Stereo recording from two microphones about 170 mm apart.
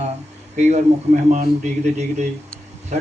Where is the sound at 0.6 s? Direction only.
45° right (ahead or behind).